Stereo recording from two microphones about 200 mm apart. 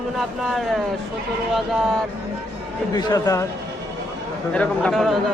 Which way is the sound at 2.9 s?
20° left (ahead or behind).